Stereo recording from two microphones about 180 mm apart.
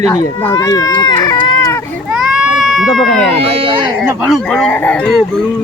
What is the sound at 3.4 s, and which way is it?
Speech, 30° right (ahead or behind).